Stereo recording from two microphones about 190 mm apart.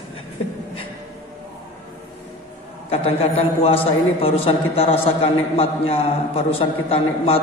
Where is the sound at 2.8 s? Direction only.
30° left (ahead or behind).